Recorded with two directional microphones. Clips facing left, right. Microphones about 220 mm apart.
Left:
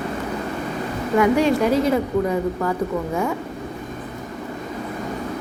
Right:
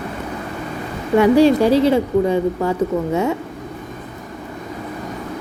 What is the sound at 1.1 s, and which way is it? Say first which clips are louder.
Speech: right 5 dB; 30° right (ahead or behind).